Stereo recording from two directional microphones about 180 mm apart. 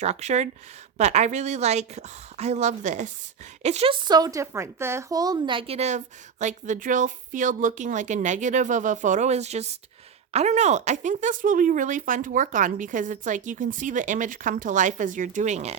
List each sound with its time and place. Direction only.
0.0 s a woman's voice: 40° right (ahead or behind)
4.0 s a woman's voice: 20° right (ahead or behind); by 15.7 s 40° right (ahead or behind)